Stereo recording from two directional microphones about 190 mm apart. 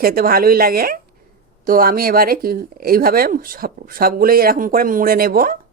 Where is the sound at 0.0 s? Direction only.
50° right (ahead or behind).